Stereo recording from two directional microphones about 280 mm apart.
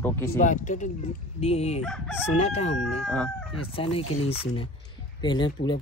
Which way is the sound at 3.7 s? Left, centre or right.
Centre.